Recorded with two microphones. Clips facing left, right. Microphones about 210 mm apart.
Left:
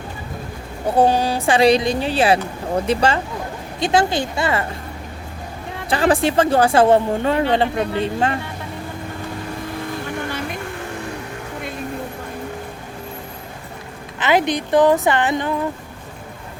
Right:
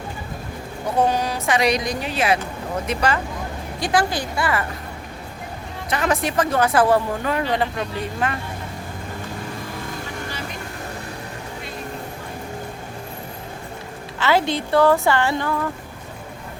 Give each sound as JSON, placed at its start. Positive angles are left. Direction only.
{"t": 0.9, "sound": "a woman's voice", "side_deg": 30}
{"t": 5.9, "sound": "speech", "side_deg": 30}
{"t": 14.2, "sound": "speech", "side_deg": 20}